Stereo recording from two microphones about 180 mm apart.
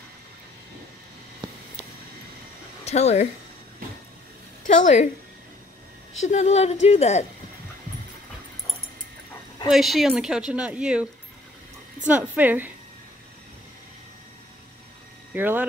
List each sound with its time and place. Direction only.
2.8 s speech: 35° left (ahead or behind)
4.6 s a woman's voice: 40° left (ahead or behind)
6.2 s speech: 40° left (ahead or behind)
9.7 s a woman's voice: centre (ahead or behind)
12.1 s a woman's voice: 10° right (ahead or behind)
15.3 s speech: 10° right (ahead or behind)